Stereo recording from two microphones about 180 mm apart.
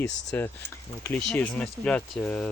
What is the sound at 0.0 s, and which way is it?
Speech, 15° left (ahead or behind).